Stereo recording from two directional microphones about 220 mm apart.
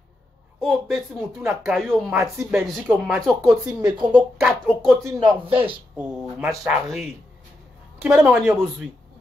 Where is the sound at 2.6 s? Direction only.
Centre (ahead or behind).